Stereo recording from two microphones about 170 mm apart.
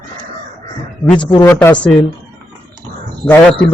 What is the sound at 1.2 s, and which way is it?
Speech, 20° left (ahead or behind).